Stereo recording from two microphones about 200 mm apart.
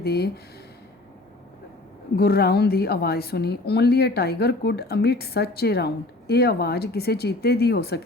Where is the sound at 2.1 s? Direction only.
50° left (ahead or behind).